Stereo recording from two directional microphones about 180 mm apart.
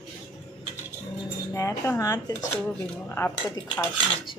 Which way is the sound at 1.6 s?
15° left (ahead or behind).